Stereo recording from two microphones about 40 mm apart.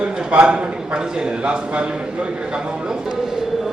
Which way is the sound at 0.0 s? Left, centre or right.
Right.